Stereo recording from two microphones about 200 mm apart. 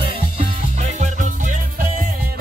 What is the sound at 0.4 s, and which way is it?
Music, 35° right (ahead or behind).